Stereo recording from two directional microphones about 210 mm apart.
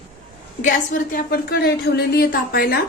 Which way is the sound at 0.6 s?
40° left (ahead or behind).